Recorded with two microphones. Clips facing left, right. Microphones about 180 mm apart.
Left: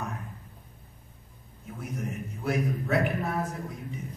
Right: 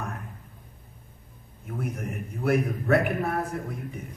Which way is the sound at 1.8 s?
55° right (ahead or behind).